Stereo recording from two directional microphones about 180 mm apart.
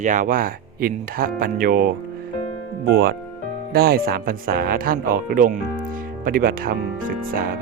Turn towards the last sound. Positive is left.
turn(degrees=-55)  # may be behind; listen again after turning